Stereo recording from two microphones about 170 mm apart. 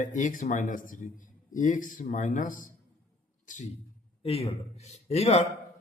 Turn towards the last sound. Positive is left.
turn(degrees=40)  # may be behind; listen again after turning